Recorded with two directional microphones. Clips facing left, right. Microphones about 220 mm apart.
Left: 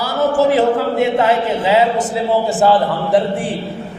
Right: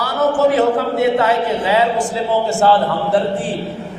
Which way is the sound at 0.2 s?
25° left (ahead or behind).